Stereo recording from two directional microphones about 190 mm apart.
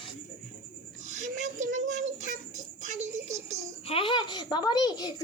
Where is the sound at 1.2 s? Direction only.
40° right (ahead or behind).